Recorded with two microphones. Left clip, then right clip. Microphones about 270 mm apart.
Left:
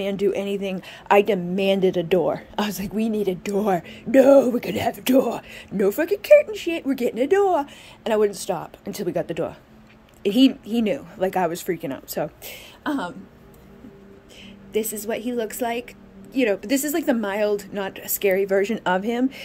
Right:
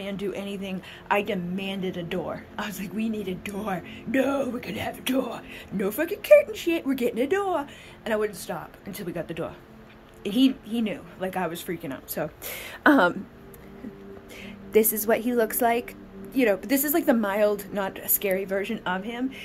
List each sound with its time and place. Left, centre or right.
0.0 s a woman's voice: centre
12.8 s speech: right
14.7 s a woman's voice: centre